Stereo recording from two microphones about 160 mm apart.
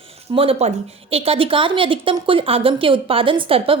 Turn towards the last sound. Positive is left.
turn(degrees=-35)  # may be behind; listen again after turning